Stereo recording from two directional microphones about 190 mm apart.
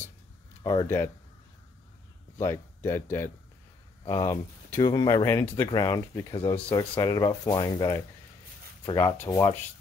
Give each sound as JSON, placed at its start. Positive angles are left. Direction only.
{"t": 0.8, "sound": "speech", "side_deg": 15}
{"t": 2.3, "sound": "speech", "side_deg": 15}